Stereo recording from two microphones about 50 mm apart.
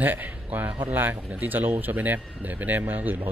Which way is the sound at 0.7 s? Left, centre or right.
Right.